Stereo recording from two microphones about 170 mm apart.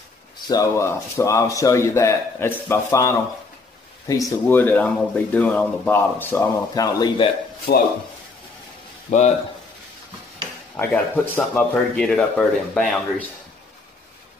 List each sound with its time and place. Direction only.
0.5 s speech: 15° left (ahead or behind)
7.7 s speech: 65° left (ahead or behind)
9.1 s a man's voice: 45° left (ahead or behind)
10.8 s speech: 10° left (ahead or behind)